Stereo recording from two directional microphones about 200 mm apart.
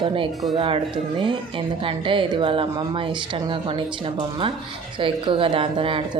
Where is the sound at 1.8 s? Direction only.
25° right (ahead or behind).